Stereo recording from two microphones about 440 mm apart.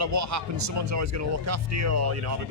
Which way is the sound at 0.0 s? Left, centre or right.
Right.